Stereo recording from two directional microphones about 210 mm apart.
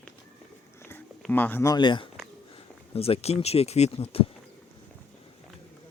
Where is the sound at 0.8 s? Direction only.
10° left (ahead or behind); by 4.2 s 30° left (ahead or behind).